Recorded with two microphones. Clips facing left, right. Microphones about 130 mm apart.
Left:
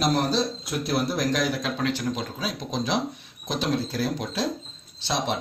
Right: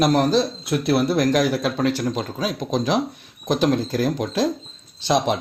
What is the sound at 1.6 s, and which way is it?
Speech, 40° right (ahead or behind).